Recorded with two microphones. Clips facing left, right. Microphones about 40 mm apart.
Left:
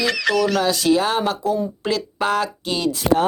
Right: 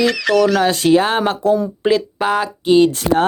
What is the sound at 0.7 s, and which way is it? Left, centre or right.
Speech, right.